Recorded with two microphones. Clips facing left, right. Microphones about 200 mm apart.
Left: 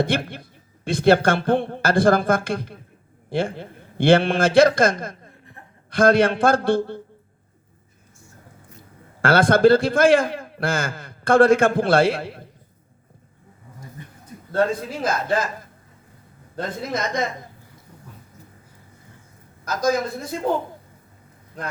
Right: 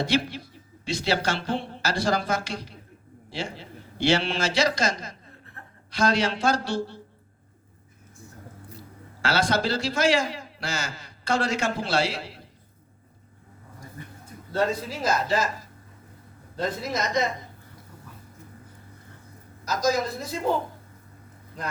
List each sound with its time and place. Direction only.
0.0 s a man's voice: 55° left (ahead or behind)
5.6 s chuckle: 15° left (ahead or behind)
5.9 s a man's voice: 55° left (ahead or behind)
9.2 s a man's voice: 55° left (ahead or behind)
14.5 s a man's voice: 55° left (ahead or behind)
19.6 s a man's voice: 55° left (ahead or behind)